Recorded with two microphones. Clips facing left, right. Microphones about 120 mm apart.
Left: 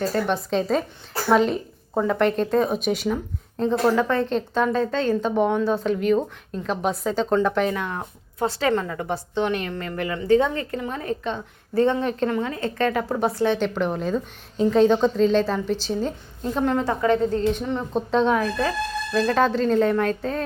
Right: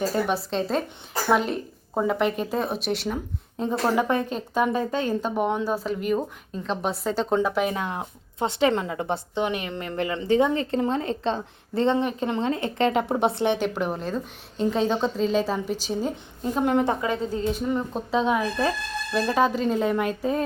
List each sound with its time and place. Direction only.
0.0 s a woman's voice: 5° right (ahead or behind)
3.6 s a woman's voice: 15° right (ahead or behind)
7.7 s a woman's voice: 20° right (ahead or behind)
13.6 s a woman's voice: 5° right (ahead or behind)
16.7 s a woman's voice: 20° right (ahead or behind)